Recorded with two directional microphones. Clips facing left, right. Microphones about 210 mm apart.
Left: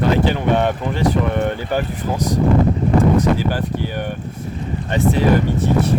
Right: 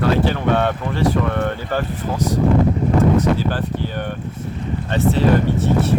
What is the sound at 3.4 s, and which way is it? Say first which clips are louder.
Speech: left 1 dB; 15° left (ahead or behind).